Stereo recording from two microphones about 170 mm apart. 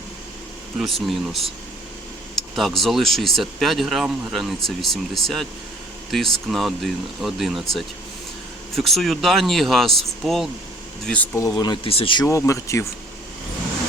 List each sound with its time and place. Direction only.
0.8 s speech: centre (ahead or behind)
11.3 s speech: 20° left (ahead or behind)
12.2 s speech: 15° left (ahead or behind)